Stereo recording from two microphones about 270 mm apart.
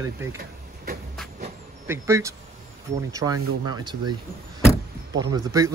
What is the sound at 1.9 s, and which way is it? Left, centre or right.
Speech, centre.